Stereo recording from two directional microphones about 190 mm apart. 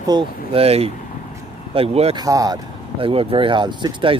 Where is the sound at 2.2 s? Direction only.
20° right (ahead or behind).